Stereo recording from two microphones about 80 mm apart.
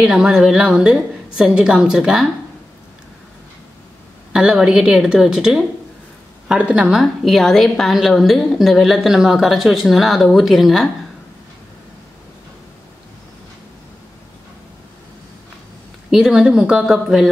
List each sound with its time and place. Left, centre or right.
0.0 s a woman's voice: centre
4.3 s a woman's voice: centre
6.9 s a woman's voice: centre
16.1 s a woman's voice: centre